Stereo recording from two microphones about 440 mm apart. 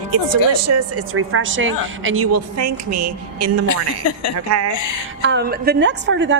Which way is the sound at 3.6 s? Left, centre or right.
Left.